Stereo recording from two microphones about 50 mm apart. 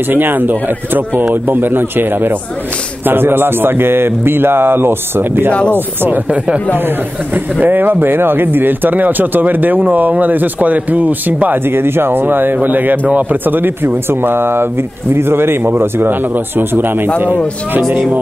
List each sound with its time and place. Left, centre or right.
0.1 s a man's voice: right
5.7 s speech: right
7.6 s speech: right
11.6 s a man's voice: right